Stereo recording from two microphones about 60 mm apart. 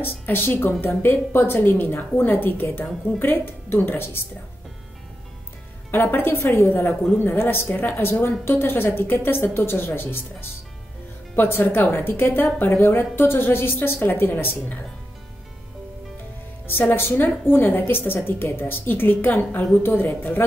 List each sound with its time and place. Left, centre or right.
0.0 s a woman's voice: left
5.9 s a woman's voice: left
6.4 s a woman's voice: left
16.6 s a woman's voice: left
19.8 s a woman's voice: left